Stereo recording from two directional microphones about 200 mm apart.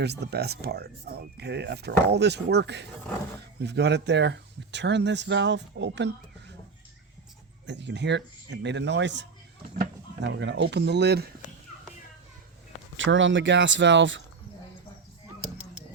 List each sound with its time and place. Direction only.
0.0 s speech: 55° right (ahead or behind)
7.7 s speech: 60° right (ahead or behind)
10.2 s speech: 60° right (ahead or behind)
13.0 s speech: 70° right (ahead or behind)